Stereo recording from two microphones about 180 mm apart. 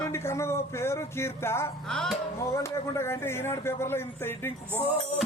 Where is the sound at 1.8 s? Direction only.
Centre (ahead or behind).